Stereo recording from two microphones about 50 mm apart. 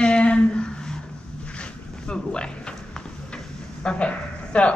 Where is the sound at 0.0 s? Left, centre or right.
Left.